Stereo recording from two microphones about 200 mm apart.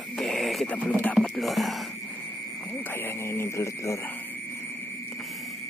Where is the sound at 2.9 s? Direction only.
10° left (ahead or behind).